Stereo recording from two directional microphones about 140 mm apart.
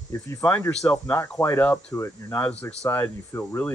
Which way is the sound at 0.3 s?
15° left (ahead or behind).